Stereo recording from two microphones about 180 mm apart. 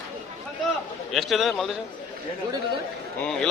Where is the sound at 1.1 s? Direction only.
Centre (ahead or behind).